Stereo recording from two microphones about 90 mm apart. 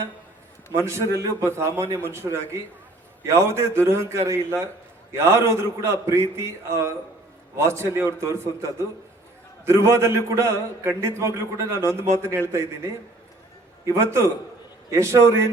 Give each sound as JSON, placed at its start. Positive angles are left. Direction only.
{"t": 0.8, "sound": "a man's voice", "side_deg": -30}
{"t": 9.6, "sound": "a man's voice", "side_deg": -30}